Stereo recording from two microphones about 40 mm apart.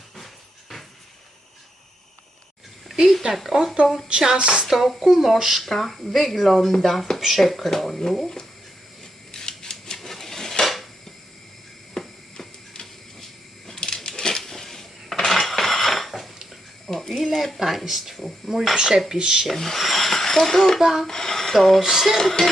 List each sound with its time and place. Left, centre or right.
3.3 s speech: centre
4.4 s speech: right
5.0 s speech: centre
9.3 s dishes: centre
11.9 s a sound: centre
13.7 s dishes: centre
16.8 s a sound: centre
18.4 s speech: centre
19.5 s speech: centre
19.8 s a sound: centre
20.7 s speech: centre
21.1 s speech: centre
21.8 s speech: centre
22.2 s speech: centre